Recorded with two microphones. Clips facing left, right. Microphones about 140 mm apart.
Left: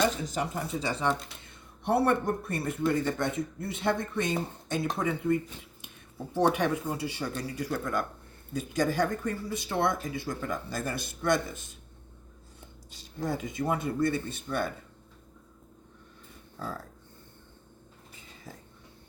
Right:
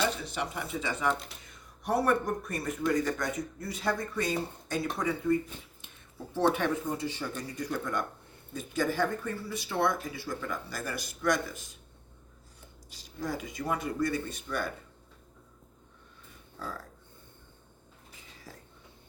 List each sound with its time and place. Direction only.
0.0 s speech: 40° left (ahead or behind); by 8.0 s 5° left (ahead or behind)
8.5 s speech: 15° left (ahead or behind)
12.9 s speech: 25° left (ahead or behind)